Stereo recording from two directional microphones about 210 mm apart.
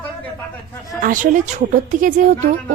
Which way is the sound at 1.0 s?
40° right (ahead or behind).